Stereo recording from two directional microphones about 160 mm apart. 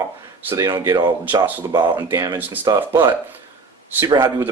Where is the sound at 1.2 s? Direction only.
10° right (ahead or behind).